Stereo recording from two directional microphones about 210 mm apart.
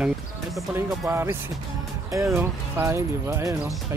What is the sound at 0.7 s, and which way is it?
Speech, 10° right (ahead or behind).